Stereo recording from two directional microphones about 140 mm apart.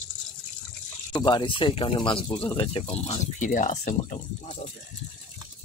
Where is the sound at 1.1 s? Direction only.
30° left (ahead or behind); by 4.2 s 60° left (ahead or behind).